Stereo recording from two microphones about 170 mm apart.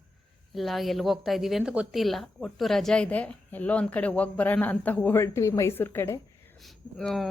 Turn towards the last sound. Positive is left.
turn(degrees=0)  # may be behind; listen again after turning